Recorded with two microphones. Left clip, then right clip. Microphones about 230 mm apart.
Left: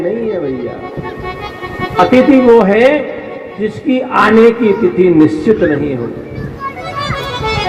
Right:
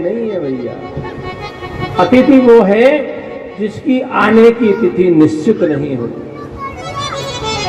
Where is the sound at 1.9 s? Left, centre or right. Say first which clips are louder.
Left 1 dB; centre.